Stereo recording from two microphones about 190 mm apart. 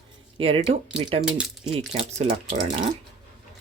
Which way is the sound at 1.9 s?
35° right (ahead or behind).